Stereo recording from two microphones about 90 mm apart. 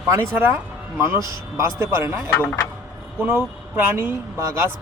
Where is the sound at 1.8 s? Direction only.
30° right (ahead or behind).